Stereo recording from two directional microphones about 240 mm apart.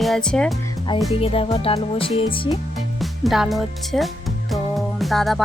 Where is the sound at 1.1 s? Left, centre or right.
Left.